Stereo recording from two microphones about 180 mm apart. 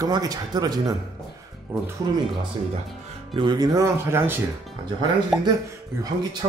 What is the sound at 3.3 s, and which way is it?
Speech, 25° right (ahead or behind).